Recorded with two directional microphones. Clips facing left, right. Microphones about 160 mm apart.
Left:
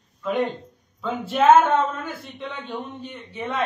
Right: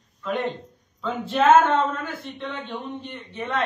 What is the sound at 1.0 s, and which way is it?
Speech, 10° left (ahead or behind).